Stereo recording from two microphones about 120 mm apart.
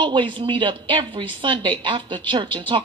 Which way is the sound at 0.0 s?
40° right (ahead or behind).